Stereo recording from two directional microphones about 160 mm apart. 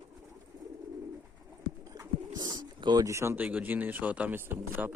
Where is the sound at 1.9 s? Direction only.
20° right (ahead or behind).